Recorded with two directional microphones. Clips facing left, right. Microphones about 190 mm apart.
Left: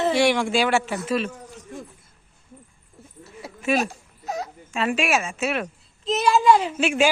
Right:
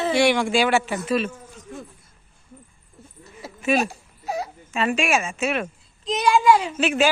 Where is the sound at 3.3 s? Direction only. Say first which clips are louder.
Right 1 dB; centre (ahead or behind).